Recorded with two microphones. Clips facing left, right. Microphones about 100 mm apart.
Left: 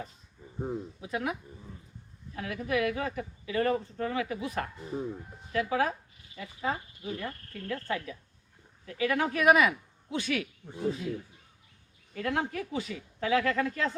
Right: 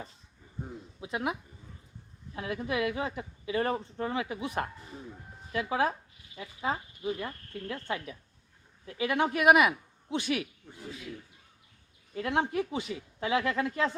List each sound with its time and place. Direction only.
1.0 s speech: 20° right (ahead or behind)
10.8 s speech: 30° left (ahead or behind)
12.1 s speech: 25° right (ahead or behind)